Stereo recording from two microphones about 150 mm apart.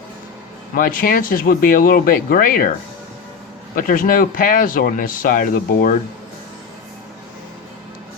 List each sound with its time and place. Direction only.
0.8 s speech: 70° left (ahead or behind)
3.8 s speech: 65° left (ahead or behind)